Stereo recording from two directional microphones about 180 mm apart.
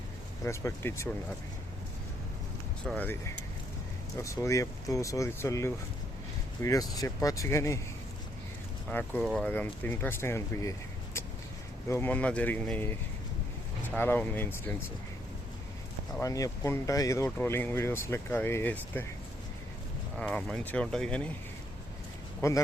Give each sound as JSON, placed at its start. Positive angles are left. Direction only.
{"t": 0.4, "sound": "speech", "side_deg": 15}
{"t": 2.8, "sound": "speech", "side_deg": 10}
{"t": 8.9, "sound": "speech", "side_deg": 10}
{"t": 16.1, "sound": "speech", "side_deg": 20}
{"t": 20.1, "sound": "speech", "side_deg": 5}
{"t": 22.4, "sound": "speech", "side_deg": 15}